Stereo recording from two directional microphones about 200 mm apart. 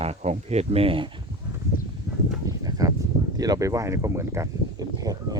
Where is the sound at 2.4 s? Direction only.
20° right (ahead or behind).